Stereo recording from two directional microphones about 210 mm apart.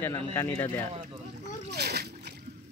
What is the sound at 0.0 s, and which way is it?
Speech, 10° left (ahead or behind).